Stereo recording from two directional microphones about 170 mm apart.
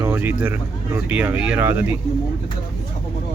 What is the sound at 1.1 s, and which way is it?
Speech, 10° right (ahead or behind).